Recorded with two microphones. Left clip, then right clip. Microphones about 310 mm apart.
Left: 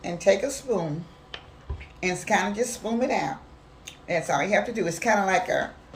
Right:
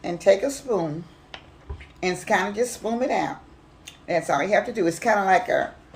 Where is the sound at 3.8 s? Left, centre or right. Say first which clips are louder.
Right 3 dB; centre.